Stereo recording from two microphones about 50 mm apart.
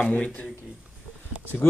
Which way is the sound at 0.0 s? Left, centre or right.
Left.